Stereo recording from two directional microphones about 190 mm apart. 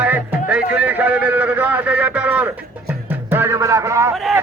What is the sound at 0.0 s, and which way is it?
A man's voice, 10° right (ahead or behind).